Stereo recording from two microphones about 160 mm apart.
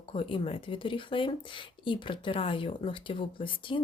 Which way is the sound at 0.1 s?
35° left (ahead or behind).